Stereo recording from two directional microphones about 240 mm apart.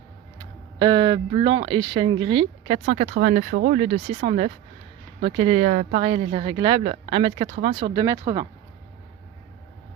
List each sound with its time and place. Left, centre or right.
0.3 s speech: centre